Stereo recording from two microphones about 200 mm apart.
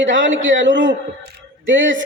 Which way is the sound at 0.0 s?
65° right (ahead or behind).